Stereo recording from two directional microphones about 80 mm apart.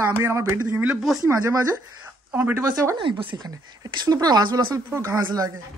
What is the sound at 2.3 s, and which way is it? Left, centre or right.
Speech, right.